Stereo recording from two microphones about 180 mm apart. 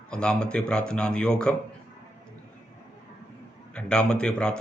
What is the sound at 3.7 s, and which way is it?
Speech, 5° left (ahead or behind).